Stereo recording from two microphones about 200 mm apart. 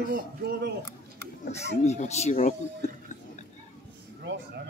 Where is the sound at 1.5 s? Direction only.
35° left (ahead or behind).